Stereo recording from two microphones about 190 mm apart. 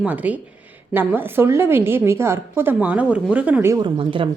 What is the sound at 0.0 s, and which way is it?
A woman's voice, 10° right (ahead or behind).